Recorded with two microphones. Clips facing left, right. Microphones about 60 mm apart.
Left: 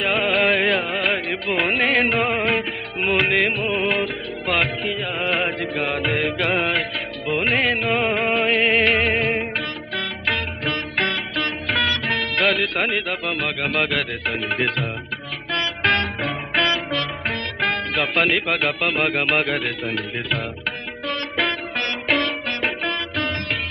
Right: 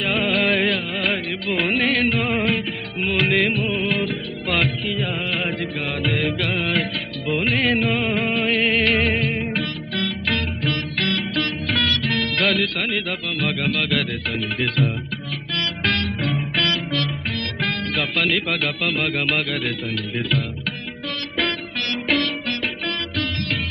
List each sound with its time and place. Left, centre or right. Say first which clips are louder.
0.0 s music: left 1 dB; centre
2.5 s music: left 1 dB; left
5.2 s mantra: left 3 dB; left
5.6 s music: left 2 dB; centre
11.3 s music: even; centre
13.7 s music: even; centre
18.1 s speech: left 2 dB; left
18.6 s music: left 2 dB; centre
20.2 s music: right 2 dB; centre
22.1 s music: even; centre